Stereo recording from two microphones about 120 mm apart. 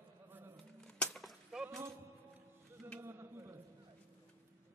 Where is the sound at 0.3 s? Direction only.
15° right (ahead or behind).